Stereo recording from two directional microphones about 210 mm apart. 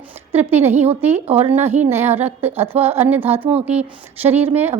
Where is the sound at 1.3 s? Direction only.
30° right (ahead or behind).